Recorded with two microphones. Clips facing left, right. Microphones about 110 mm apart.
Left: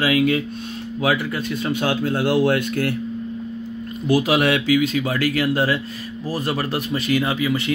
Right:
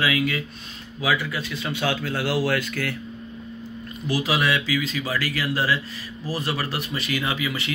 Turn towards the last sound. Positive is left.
turn(degrees=40)  # may be behind; listen again after turning